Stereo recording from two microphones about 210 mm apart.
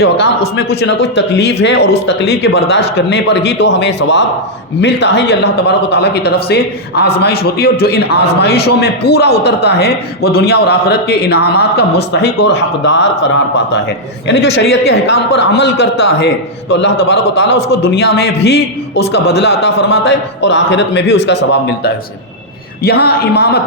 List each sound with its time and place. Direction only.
0.8 s a man's voice: 55° left (ahead or behind)